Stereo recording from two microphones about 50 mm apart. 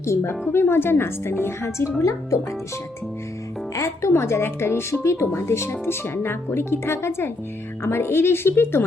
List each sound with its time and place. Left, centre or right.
0.0 s a woman's voice: left
0.4 s speech: left
2.0 s speech: left
3.8 s speech: left
4.1 s speech: left
5.0 s speech: left